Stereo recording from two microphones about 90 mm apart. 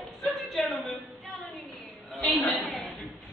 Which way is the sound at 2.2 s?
20° left (ahead or behind).